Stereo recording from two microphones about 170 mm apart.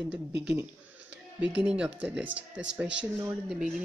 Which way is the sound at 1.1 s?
90° right.